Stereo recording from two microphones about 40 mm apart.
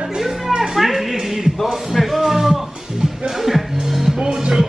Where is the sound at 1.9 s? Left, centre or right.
Centre.